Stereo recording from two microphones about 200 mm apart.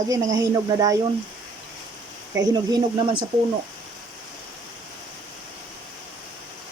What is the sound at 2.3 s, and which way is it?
Speech, 20° right (ahead or behind).